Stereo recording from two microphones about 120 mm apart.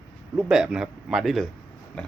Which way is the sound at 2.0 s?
10° left (ahead or behind).